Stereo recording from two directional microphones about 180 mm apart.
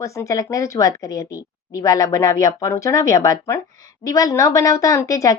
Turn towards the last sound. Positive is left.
turn(degrees=20)  # may be behind; listen again after turning